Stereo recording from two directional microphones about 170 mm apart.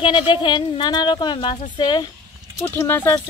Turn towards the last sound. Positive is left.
turn(degrees=15)  # may be behind; listen again after turning